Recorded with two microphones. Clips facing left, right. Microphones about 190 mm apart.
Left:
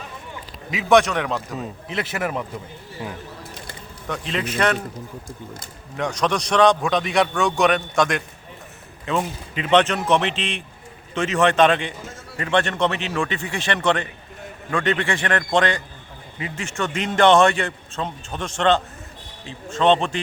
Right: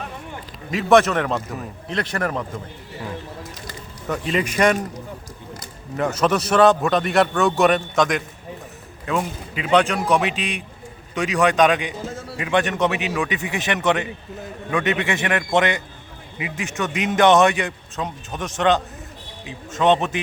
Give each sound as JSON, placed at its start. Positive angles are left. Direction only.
{"t": 0.7, "sound": "a man's voice", "side_deg": 0}
{"t": 4.3, "sound": "speech", "side_deg": -10}
{"t": 6.0, "sound": "a man's voice", "side_deg": -5}
{"t": 15.3, "sound": "speech", "side_deg": -10}